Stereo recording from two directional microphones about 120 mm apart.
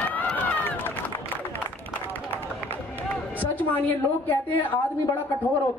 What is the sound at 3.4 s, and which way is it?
A woman's voice, 15° left (ahead or behind).